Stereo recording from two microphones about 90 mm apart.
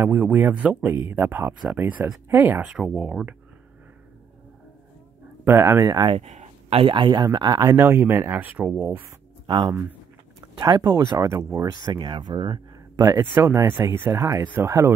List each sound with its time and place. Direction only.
0.0 s speech: 20° right (ahead or behind)
2.2 s speech: 30° right (ahead or behind)
2.6 s speech: 5° right (ahead or behind)
5.4 s speech: 30° right (ahead or behind)
5.9 s speech: 50° right (ahead or behind)
6.7 s speech: 80° right; by 7.2 s 60° right (ahead or behind)
7.5 s speech: 35° right (ahead or behind)
7.8 s speech: 25° right (ahead or behind)
9.5 s speech: 60° right (ahead or behind)
10.4 s speech: 45° right (ahead or behind)
11.4 s speech: 30° right (ahead or behind)
11.7 s speech: 55° right (ahead or behind)
12.9 s speech: 40° right (ahead or behind)
13.2 s speech: 25° right (ahead or behind)